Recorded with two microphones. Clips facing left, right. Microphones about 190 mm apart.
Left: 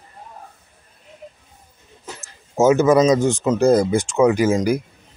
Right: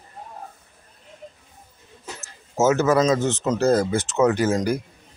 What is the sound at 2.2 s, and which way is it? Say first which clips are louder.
Speech: left 4 dB; 15° left (ahead or behind).